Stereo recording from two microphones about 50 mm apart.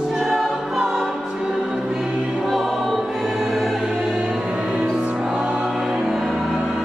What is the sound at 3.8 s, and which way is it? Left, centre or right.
Music, centre.